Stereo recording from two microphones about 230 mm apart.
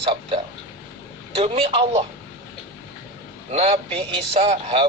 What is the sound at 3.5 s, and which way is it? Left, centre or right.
A man's voice, right.